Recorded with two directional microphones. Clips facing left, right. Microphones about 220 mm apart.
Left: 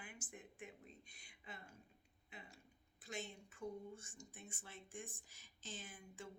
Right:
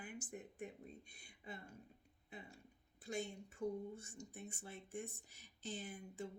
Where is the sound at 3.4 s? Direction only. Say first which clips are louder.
Right 5 dB; 40° right (ahead or behind).